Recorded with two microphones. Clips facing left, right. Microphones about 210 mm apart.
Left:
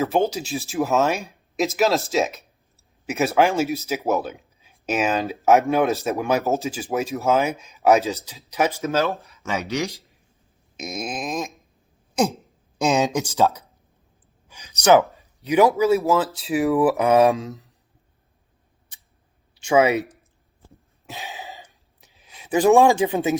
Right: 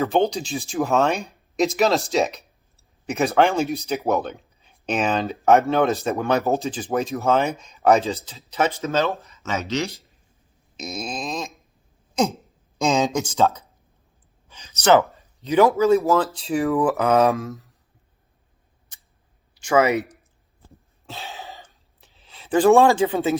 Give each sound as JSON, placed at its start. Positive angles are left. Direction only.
{"t": 0.0, "sound": "speech", "side_deg": 0}
{"t": 7.9, "sound": "speech", "side_deg": 10}
{"t": 11.0, "sound": "speech", "side_deg": 15}
{"t": 12.8, "sound": "speech", "side_deg": 10}
{"t": 15.1, "sound": "a sound", "side_deg": 10}
{"t": 16.0, "sound": "speech", "side_deg": 0}
{"t": 17.0, "sound": "speech", "side_deg": 15}
{"t": 19.7, "sound": "speech", "side_deg": 15}
{"t": 21.1, "sound": "a sound", "side_deg": 15}